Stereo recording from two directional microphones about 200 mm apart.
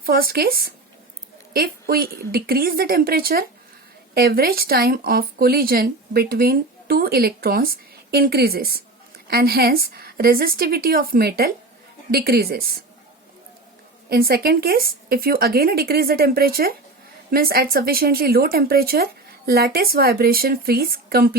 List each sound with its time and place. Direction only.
0.0 s a woman's voice: 50° right (ahead or behind)
14.1 s a woman's voice: 50° right (ahead or behind)